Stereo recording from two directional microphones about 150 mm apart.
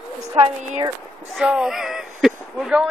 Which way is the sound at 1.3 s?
5° right (ahead or behind).